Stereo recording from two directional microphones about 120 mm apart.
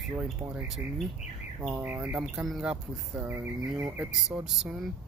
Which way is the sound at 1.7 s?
15° right (ahead or behind).